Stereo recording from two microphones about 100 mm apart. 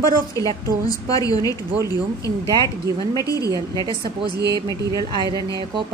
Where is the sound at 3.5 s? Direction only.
40° right (ahead or behind).